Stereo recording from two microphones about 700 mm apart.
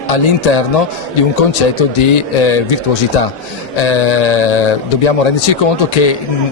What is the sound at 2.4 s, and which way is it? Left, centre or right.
Speech, left.